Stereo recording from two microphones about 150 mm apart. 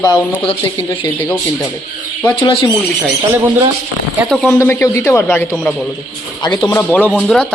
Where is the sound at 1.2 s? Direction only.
10° left (ahead or behind).